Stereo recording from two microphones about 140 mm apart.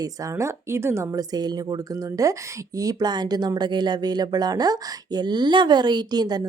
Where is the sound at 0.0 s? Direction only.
25° right (ahead or behind).